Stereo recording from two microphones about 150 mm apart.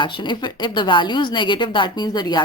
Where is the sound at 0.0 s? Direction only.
30° left (ahead or behind).